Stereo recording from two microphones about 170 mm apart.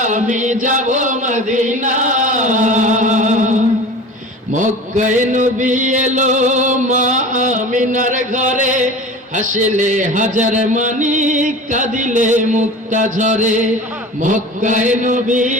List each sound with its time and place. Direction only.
0.0 s chant: 45° right (ahead or behind)
4.5 s a sound: 45° right (ahead or behind)
9.3 s speech: 50° right (ahead or behind)